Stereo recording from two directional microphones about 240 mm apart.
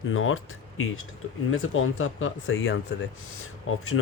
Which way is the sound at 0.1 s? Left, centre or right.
Left.